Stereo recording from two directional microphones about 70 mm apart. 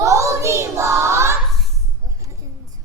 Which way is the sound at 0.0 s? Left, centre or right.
Right.